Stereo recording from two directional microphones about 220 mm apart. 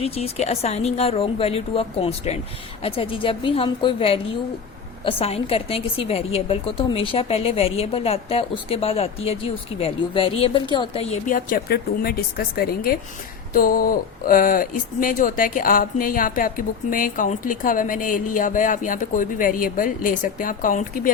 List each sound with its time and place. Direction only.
0.0 s a woman's voice: 30° left (ahead or behind)
11.3 s speech: 40° left (ahead or behind)